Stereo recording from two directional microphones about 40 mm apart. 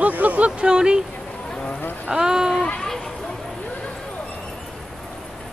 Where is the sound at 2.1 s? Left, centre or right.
Centre.